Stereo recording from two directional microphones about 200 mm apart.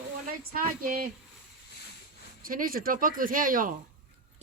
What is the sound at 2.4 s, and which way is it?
Speech, 45° right (ahead or behind).